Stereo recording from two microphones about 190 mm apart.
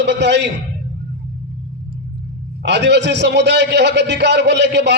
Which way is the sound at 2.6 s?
65° right (ahead or behind).